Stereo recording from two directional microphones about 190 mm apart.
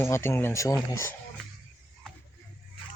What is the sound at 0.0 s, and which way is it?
Speech, 15° left (ahead or behind).